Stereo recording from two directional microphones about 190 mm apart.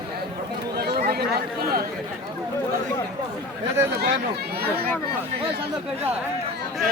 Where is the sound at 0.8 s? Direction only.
55° right (ahead or behind).